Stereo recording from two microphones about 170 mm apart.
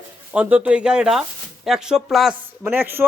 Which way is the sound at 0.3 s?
10° right (ahead or behind).